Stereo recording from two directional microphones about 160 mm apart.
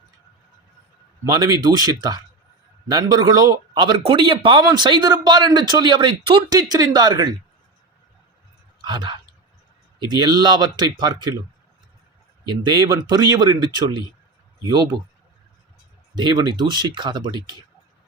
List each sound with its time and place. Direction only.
1.2 s speech: 25° right (ahead or behind)
8.8 s speech: 30° right (ahead or behind)
12.5 s speech: 25° right (ahead or behind)
16.1 s speech: 25° right (ahead or behind)